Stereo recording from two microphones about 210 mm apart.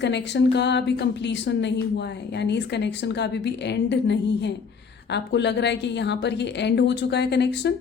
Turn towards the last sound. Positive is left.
turn(degrees=55)  # may be behind; listen again after turning